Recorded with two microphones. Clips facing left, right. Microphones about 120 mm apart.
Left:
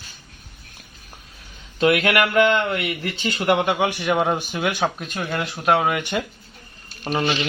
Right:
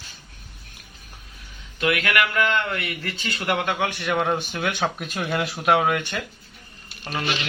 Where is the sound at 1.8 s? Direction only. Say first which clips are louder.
Left 5 dB; 30° left (ahead or behind); by 6.0 s 5° left (ahead or behind).